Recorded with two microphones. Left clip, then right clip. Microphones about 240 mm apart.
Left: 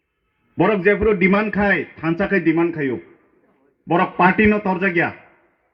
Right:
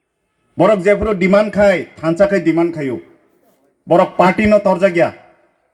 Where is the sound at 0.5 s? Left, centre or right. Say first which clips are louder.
Right 5 dB; right.